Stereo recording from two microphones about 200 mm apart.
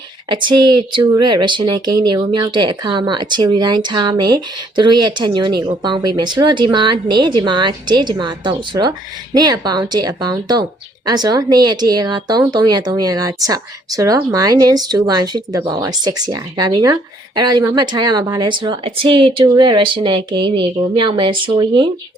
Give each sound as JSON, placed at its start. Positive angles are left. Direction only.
{"t": 0.3, "sound": "speech", "side_deg": -25}